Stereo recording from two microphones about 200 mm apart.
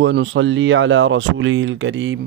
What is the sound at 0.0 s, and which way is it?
Speech, 65° right (ahead or behind).